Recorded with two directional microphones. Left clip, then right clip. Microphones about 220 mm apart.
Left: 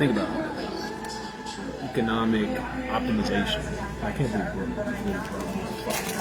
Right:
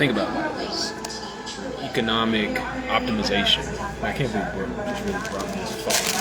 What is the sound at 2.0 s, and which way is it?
Speech, 15° left (ahead or behind).